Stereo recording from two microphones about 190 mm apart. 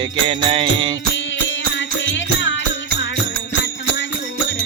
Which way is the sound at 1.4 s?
70° left (ahead or behind).